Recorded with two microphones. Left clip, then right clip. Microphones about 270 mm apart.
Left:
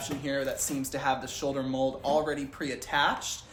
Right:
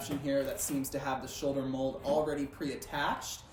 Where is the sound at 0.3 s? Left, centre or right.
Centre.